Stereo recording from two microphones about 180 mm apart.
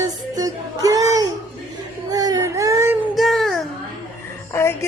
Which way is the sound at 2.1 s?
20° right (ahead or behind).